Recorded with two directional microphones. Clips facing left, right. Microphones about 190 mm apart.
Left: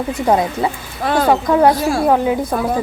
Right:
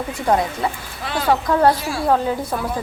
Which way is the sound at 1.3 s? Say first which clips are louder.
Left 2 dB; 20° left (ahead or behind).